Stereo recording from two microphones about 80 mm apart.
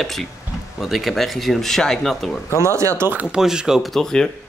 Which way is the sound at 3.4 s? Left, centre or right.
Centre.